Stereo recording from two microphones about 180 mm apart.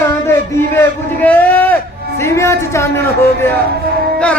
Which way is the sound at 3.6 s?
60° right (ahead or behind).